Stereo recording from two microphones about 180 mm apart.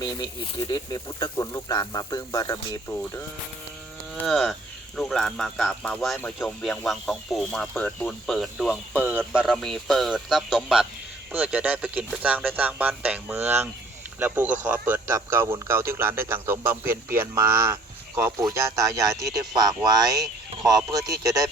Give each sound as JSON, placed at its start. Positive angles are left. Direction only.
{"t": 0.0, "sound": "speech", "side_deg": 20}
{"t": 4.1, "sound": "cattle", "side_deg": 0}
{"t": 4.9, "sound": "speech", "side_deg": 0}